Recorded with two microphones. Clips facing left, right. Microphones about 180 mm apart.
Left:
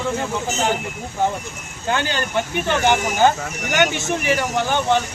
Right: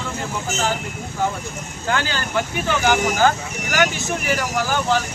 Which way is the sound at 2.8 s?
25° left (ahead or behind).